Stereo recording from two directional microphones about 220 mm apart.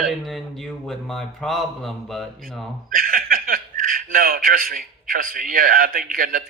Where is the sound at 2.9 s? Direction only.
40° right (ahead or behind).